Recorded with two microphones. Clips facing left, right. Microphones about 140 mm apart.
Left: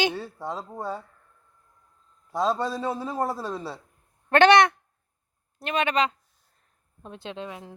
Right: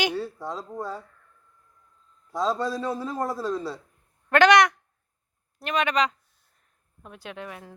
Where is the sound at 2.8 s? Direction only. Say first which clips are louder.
Left 1 dB; 25° left (ahead or behind).